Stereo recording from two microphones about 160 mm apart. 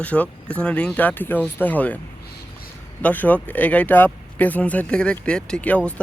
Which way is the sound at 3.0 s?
10° left (ahead or behind).